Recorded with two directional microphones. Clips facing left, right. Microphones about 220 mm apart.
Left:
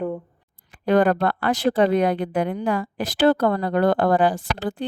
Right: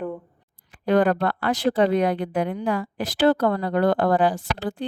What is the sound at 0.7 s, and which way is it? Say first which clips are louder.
Speech: left 1 dB; 50° left (ahead or behind).